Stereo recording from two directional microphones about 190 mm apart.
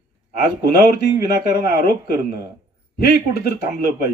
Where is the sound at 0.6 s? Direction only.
55° left (ahead or behind).